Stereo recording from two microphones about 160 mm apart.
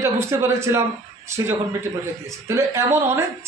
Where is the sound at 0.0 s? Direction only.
15° right (ahead or behind).